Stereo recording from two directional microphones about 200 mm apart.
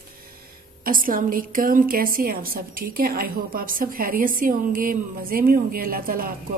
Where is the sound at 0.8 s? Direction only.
45° right (ahead or behind).